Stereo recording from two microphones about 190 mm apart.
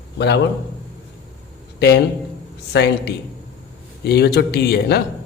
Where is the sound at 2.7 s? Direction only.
60° left (ahead or behind).